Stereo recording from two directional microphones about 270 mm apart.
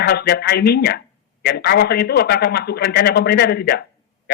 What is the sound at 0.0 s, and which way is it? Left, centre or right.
A man's voice, left.